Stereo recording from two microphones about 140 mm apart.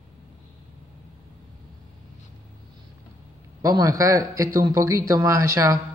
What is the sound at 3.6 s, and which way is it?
A man's voice, 25° right (ahead or behind).